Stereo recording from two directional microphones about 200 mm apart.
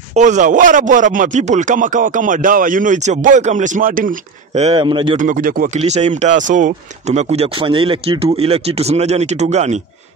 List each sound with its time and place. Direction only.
0.1 s speech: 40° right (ahead or behind)
4.6 s speech: 30° right (ahead or behind)
5.1 s speech: 40° right (ahead or behind)